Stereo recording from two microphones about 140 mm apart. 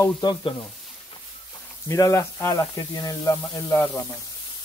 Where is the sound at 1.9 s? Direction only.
20° left (ahead or behind).